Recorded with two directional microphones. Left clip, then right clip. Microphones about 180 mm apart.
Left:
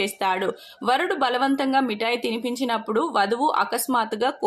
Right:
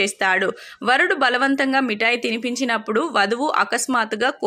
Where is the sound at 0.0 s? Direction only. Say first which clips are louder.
Right 4 dB; 15° right (ahead or behind).